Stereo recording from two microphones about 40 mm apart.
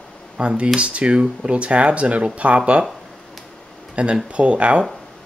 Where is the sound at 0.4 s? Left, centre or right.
Right.